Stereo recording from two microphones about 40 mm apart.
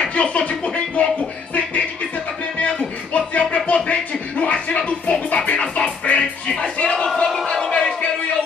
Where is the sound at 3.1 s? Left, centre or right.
Left.